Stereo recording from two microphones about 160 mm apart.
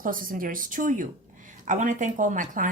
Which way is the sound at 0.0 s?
60° right (ahead or behind).